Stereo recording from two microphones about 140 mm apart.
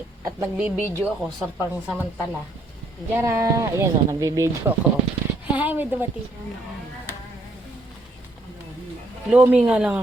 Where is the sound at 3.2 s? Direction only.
25° right (ahead or behind).